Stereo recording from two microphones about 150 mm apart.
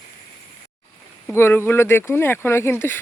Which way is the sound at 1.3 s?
15° left (ahead or behind).